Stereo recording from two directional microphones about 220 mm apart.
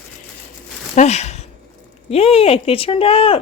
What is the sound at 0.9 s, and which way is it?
Speech, 30° left (ahead or behind).